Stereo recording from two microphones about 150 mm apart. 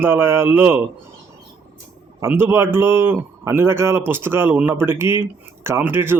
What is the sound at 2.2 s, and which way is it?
Speech, 15° right (ahead or behind).